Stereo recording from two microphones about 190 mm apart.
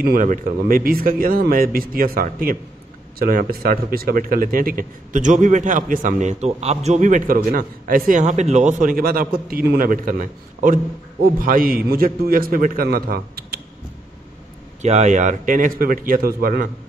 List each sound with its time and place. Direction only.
0.0 s speech: 45° right (ahead or behind)
11.3 s speech: 50° right (ahead or behind)
14.8 s speech: 35° right (ahead or behind); by 16.5 s 50° right (ahead or behind)